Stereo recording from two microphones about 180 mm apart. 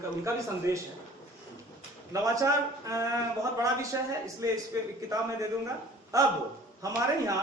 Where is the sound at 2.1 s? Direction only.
20° right (ahead or behind).